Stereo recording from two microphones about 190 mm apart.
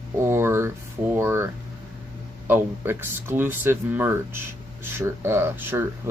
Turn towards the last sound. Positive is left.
turn(degrees=-10)  # may be behind; listen again after turning